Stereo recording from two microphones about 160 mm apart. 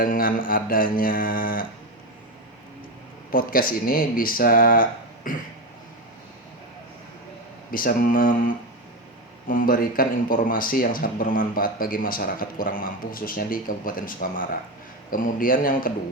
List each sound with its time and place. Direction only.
0.0 s speech: 60° left (ahead or behind)
3.3 s speech: 65° left (ahead or behind)
7.7 s speech: 60° left (ahead or behind)